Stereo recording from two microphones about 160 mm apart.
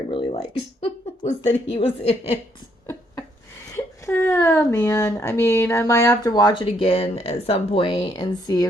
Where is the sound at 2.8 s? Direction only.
15° left (ahead or behind).